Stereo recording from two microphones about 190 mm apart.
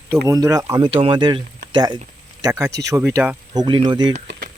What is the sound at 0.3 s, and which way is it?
Speech, 15° right (ahead or behind).